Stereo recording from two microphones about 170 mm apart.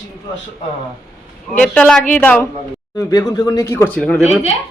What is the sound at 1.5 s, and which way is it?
A woman's voice, 10° left (ahead or behind).